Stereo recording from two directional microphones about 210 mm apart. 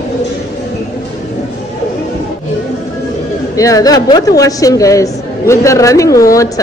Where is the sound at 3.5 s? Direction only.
15° left (ahead or behind).